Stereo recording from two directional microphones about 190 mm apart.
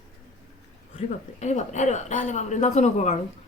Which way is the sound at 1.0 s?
35° left (ahead or behind).